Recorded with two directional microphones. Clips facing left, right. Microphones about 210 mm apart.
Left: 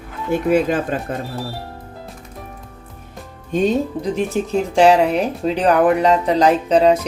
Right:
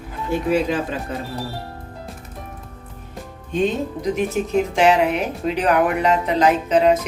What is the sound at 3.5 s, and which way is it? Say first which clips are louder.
Speech: left 3 dB; 40° left (ahead or behind).